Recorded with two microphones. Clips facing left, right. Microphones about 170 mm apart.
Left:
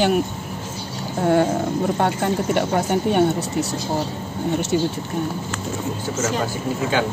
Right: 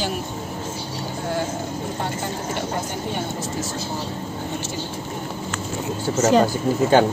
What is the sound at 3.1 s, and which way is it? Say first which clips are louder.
Speech: left 9 dB; 65° left (ahead or behind).